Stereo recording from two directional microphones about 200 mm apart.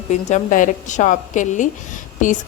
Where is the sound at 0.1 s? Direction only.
35° left (ahead or behind).